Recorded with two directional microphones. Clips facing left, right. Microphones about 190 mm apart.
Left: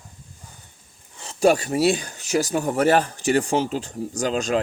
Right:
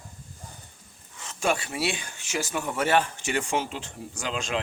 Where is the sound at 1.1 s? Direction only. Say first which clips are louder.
Left 9 dB; 35° left (ahead or behind).